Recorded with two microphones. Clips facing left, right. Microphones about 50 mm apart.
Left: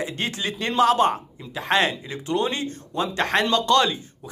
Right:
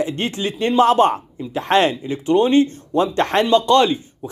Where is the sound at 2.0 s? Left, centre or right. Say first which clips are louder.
Right 8 dB; right.